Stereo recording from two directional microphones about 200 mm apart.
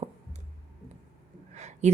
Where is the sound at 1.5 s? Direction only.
35° right (ahead or behind).